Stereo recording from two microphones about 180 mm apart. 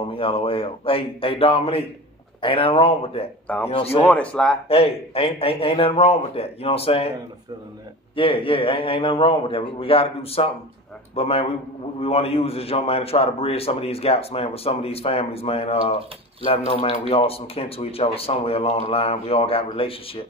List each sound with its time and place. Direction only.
0.0 s a man's voice: 30° left (ahead or behind)
4.0 s speech: 10° left (ahead or behind)
4.6 s a man's voice: 30° left (ahead or behind)
8.2 s a man's voice: 30° left (ahead or behind)